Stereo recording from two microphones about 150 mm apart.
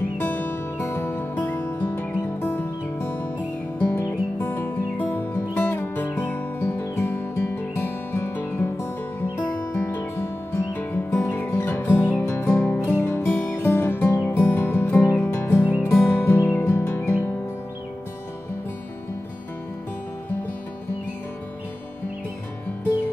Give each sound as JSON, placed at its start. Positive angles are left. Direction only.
{"t": 0.2, "sound": "music", "side_deg": 15}